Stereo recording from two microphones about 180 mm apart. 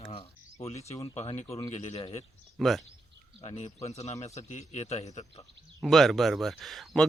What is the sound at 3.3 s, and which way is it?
A man's voice, 35° left (ahead or behind).